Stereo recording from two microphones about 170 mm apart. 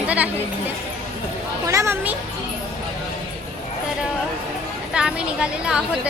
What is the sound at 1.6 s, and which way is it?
Speech, 15° right (ahead or behind).